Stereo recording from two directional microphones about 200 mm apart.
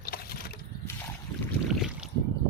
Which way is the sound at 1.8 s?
Centre (ahead or behind).